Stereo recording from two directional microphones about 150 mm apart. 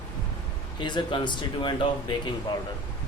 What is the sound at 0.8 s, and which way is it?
Speech, 30° left (ahead or behind).